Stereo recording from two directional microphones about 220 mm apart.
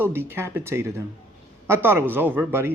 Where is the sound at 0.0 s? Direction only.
10° right (ahead or behind).